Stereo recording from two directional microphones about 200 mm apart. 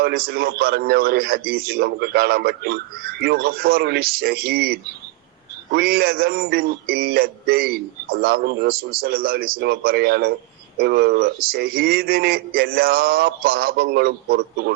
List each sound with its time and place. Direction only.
0.0 s a man's voice: 50° right (ahead or behind)